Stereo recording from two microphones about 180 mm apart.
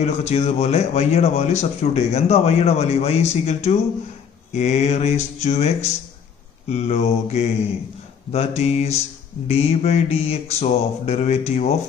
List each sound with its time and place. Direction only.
0.0 s a man's voice: 35° left (ahead or behind)